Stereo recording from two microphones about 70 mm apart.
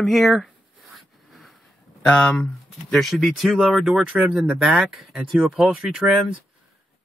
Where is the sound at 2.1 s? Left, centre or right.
Centre.